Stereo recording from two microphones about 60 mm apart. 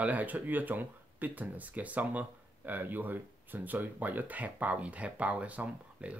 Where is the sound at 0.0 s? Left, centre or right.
Right.